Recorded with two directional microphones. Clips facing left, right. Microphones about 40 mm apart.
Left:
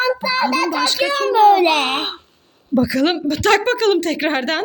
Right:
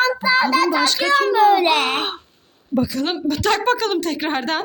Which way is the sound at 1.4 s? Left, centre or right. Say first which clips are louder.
Left 6 dB; centre.